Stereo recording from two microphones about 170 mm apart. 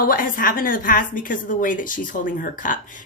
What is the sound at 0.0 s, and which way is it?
A woman's voice, 55° left (ahead or behind).